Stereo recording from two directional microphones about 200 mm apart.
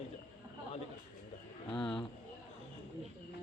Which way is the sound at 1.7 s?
25° left (ahead or behind).